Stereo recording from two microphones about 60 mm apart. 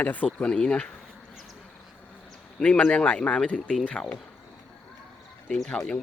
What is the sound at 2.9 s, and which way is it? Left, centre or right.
Speech, left.